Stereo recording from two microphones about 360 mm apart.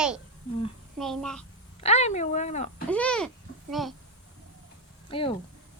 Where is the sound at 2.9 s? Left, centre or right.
Centre.